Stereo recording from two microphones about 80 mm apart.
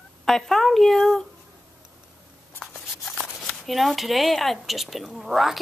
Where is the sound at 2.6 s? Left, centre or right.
Centre.